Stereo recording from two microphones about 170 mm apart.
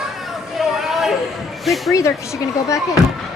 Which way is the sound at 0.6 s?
Centre (ahead or behind).